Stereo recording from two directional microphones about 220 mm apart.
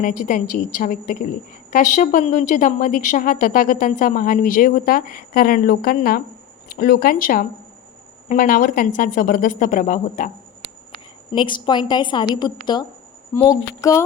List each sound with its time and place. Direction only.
0.0 s a woman's voice: 35° left (ahead or behind)
11.3 s a woman's voice: 20° left (ahead or behind)